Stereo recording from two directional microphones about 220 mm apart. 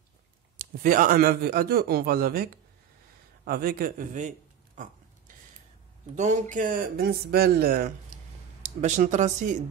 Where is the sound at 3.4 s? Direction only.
45° right (ahead or behind).